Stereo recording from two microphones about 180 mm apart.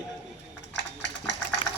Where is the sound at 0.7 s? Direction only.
80° left.